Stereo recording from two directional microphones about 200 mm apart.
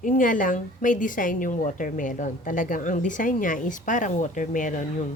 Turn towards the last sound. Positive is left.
turn(degrees=40)  # may be behind; listen again after turning